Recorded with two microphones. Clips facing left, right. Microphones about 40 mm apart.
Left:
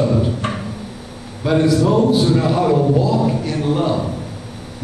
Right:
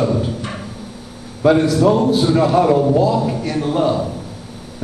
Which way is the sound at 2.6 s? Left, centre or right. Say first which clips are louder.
Right 2 dB; centre.